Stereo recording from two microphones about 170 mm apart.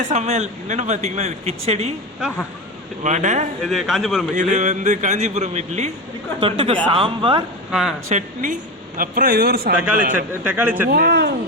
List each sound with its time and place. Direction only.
0.1 s speech: 40° right (ahead or behind)
3.0 s a man's voice: 45° right (ahead or behind)
3.7 s a man's voice: centre (ahead or behind)
4.4 s a man's voice: 45° right (ahead or behind); by 7.4 s 30° right (ahead or behind)
7.7 s a man's voice: centre (ahead or behind)
8.1 s a man's voice: 50° right (ahead or behind)
9.9 s a man's voice: 50° right (ahead or behind)
10.3 s speech: 10° right (ahead or behind)
10.8 s speech: 70° right (ahead or behind)